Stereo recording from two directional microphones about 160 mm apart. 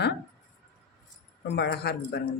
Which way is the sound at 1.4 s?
90° left.